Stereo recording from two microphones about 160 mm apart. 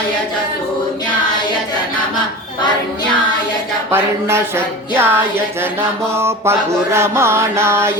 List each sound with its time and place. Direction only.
3.9 s mantra: 15° right (ahead or behind)